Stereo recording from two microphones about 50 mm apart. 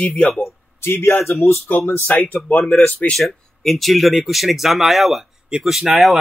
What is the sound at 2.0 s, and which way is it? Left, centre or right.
Speech, left.